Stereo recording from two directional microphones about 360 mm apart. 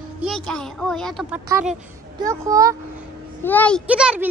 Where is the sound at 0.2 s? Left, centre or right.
Centre.